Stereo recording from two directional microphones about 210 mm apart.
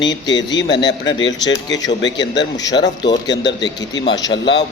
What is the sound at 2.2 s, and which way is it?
Speech, 20° left (ahead or behind).